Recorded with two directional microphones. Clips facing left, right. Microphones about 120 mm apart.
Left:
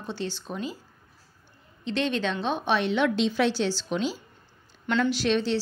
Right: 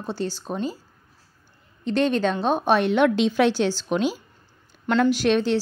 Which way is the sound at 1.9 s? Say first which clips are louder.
Right 6 dB; 45° right (ahead or behind).